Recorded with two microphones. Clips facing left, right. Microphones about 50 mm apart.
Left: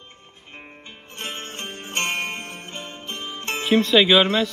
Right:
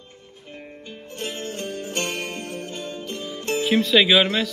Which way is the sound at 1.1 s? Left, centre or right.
Left.